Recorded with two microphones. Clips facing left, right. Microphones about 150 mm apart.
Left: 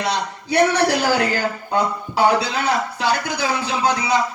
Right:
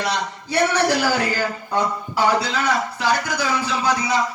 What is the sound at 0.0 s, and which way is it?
A man's voice, 60° left (ahead or behind).